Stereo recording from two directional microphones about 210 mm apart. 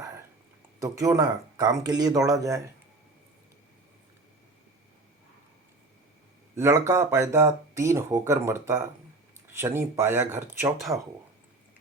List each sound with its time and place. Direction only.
0.8 s speech: 15° right (ahead or behind)
6.6 s speech: 15° right (ahead or behind)